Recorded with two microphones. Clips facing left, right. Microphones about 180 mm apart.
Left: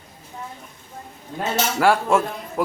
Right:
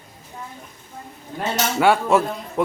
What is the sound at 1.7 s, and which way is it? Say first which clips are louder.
Speech: right 1 dB; centre (ahead or behind).